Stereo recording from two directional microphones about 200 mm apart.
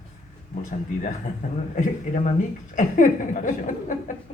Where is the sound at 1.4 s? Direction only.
40° left (ahead or behind).